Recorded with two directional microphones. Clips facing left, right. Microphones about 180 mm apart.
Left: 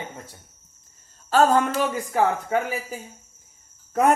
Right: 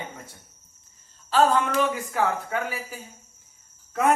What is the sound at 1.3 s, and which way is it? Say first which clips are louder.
Speech: left 2 dB; 45° left (ahead or behind).